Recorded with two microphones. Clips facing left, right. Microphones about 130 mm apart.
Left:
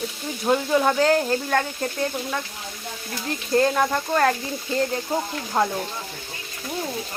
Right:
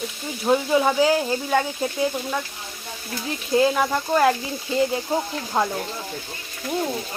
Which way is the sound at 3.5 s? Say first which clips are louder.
Right 1 dB; 5° right (ahead or behind).